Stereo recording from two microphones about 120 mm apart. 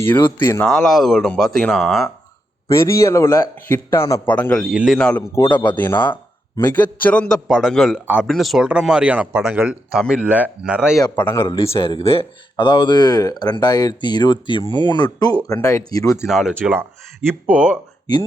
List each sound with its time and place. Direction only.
0.0 s a man's voice: 15° left (ahead or behind)
0.6 s speech: 5° left (ahead or behind)
2.6 s a man's voice: 25° left (ahead or behind)
4.3 s a man's voice: 10° left (ahead or behind)
5.3 s a man's voice: 20° left (ahead or behind)
7.4 s speech: 5° right (ahead or behind)
8.0 s speech: 10° right (ahead or behind)
8.3 s speech: centre (ahead or behind)
11.1 s a man's voice: 15° left (ahead or behind)
11.4 s a man's voice: 45° left (ahead or behind)
15.4 s a man's voice: 25° left (ahead or behind)
16.2 s speech: 5° right (ahead or behind)